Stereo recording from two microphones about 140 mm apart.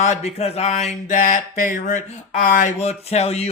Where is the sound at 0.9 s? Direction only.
65° left (ahead or behind).